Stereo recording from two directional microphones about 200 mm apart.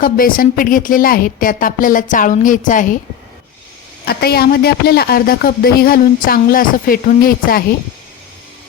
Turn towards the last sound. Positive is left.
turn(degrees=45)  # may be behind; listen again after turning